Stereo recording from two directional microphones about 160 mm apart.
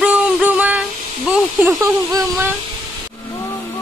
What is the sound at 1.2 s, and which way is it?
Speech, 15° right (ahead or behind).